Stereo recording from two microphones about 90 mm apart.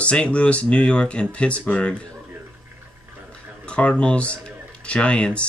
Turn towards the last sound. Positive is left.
turn(degrees=10)  # may be behind; listen again after turning